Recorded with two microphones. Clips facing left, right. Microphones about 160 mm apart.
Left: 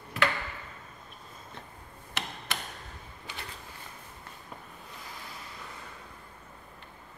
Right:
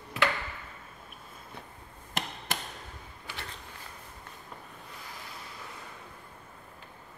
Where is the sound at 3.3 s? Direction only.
20° left (ahead or behind).